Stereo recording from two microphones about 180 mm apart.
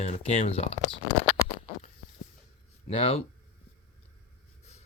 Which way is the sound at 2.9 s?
35° left (ahead or behind).